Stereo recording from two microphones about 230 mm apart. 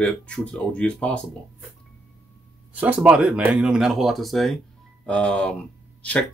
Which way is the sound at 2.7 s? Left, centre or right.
Centre.